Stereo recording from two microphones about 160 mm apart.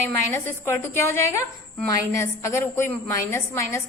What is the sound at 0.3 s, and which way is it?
Speech, 15° left (ahead or behind).